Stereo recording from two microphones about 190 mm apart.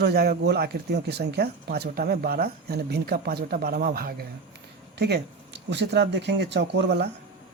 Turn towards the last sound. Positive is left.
turn(degrees=-60)  # may be behind; listen again after turning